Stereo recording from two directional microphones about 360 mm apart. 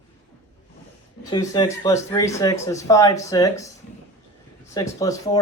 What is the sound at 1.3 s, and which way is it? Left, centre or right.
Speech, centre.